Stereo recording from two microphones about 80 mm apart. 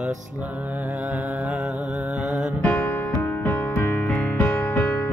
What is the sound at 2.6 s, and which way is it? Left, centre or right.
Music, left.